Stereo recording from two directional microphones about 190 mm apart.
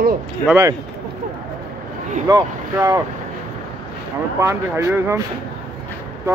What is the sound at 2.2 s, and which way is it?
Speech, 15° right (ahead or behind).